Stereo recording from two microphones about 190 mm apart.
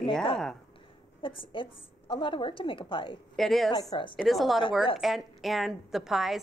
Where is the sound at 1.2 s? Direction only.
25° left (ahead or behind).